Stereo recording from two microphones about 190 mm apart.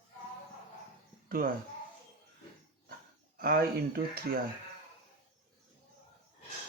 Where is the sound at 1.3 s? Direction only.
50° right (ahead or behind).